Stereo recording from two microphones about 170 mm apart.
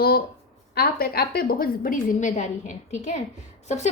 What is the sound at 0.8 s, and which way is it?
A woman's voice, 65° left (ahead or behind).